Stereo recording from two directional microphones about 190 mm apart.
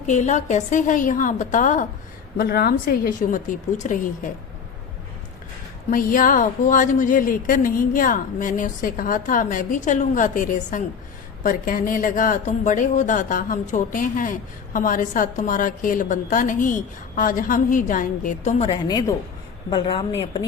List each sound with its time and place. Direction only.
0.1 s a woman's voice: 40° left (ahead or behind)
2.4 s a woman's voice: 55° left (ahead or behind)
5.9 s a woman's voice: 45° left (ahead or behind)
18.7 s a woman's voice: 20° left (ahead or behind)